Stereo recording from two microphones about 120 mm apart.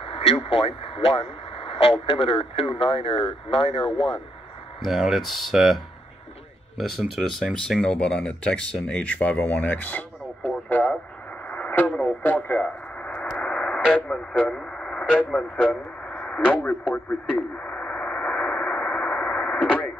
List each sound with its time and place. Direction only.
0.0 s speech: 50° left (ahead or behind)
4.8 s speech: centre (ahead or behind)
6.8 s speech: centre (ahead or behind)
11.4 s radio: 10° left (ahead or behind)